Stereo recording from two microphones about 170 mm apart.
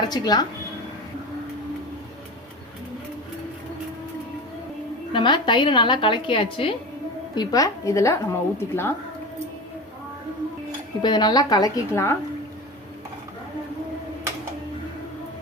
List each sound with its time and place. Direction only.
0.1 s a woman's voice: 25° left (ahead or behind)
5.1 s a woman's voice: 25° left (ahead or behind)
7.3 s a woman's voice: 20° left (ahead or behind)
11.0 s a woman's voice: 25° left (ahead or behind)